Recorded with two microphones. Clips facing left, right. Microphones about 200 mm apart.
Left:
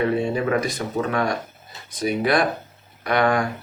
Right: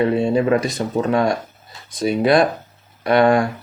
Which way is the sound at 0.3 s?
25° right (ahead or behind).